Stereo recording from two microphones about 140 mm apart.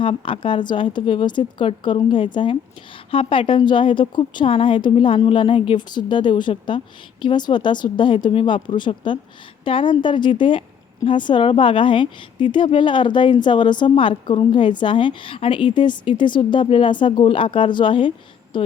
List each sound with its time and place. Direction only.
0.0 s a woman's voice: 40° left (ahead or behind)